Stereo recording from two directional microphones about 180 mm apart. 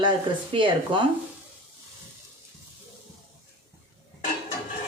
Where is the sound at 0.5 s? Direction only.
25° right (ahead or behind).